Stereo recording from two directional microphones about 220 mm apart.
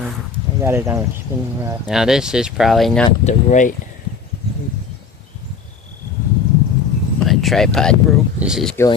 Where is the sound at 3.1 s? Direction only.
35° left (ahead or behind).